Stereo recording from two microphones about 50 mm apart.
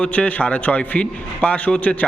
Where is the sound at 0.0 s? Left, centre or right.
Left.